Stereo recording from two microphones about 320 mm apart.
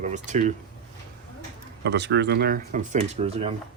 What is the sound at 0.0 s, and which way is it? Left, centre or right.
Speech, right.